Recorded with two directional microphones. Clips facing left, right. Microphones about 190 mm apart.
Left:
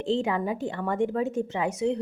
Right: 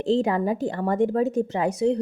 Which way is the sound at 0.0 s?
40° right (ahead or behind).